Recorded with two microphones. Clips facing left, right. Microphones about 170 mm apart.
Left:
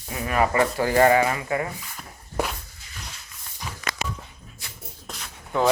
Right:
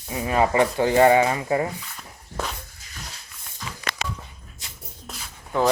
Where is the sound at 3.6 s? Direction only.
15° left (ahead or behind).